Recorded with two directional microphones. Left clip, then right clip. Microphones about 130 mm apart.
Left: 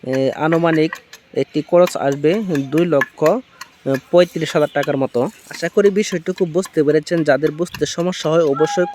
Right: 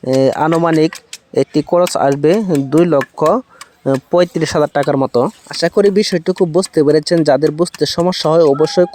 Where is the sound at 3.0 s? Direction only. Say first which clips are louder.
Right 2 dB; 40° right (ahead or behind).